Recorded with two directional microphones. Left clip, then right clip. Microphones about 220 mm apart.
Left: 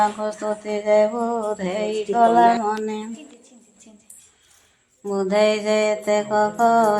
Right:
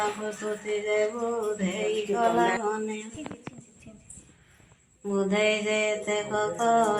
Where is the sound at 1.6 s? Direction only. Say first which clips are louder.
Left 5 dB; 45° left (ahead or behind).